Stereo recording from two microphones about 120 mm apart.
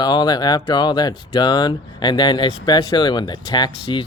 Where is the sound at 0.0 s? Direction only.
35° left (ahead or behind).